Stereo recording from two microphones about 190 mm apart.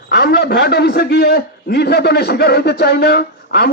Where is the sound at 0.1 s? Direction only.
55° left (ahead or behind).